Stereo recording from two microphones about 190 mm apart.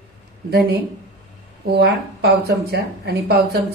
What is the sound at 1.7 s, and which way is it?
Speech, 55° right (ahead or behind).